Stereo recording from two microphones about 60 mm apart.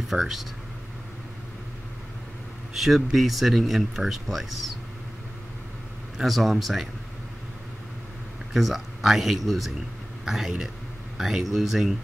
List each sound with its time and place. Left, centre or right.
0.1 s speech: centre
2.7 s speech: centre
6.1 s speech: centre
8.5 s a man's voice: centre